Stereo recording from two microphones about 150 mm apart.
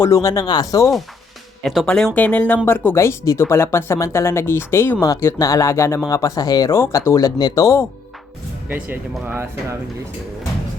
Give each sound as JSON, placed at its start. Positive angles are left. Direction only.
{"t": 0.0, "sound": "speech", "side_deg": 20}
{"t": 1.6, "sound": "speech", "side_deg": 0}
{"t": 8.7, "sound": "speech", "side_deg": -15}